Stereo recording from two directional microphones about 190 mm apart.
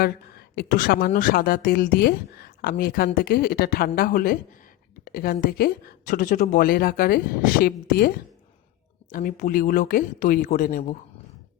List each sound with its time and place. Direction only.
0.0 s a woman's voice: 55° left (ahead or behind)
9.1 s a woman's voice: 45° left (ahead or behind)